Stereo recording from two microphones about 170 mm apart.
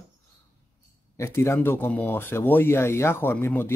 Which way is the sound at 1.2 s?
15° left (ahead or behind).